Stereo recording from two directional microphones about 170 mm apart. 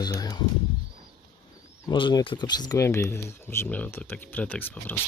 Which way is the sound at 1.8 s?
25° left (ahead or behind).